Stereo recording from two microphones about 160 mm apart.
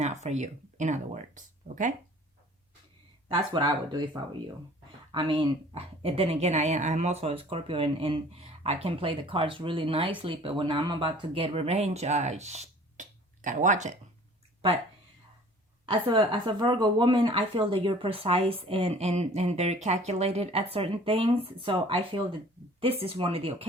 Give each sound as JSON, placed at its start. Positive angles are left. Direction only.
{"t": 0.0, "sound": "speech", "side_deg": -45}
{"t": 5.1, "sound": "speech", "side_deg": -30}
{"t": 15.9, "sound": "speech", "side_deg": -30}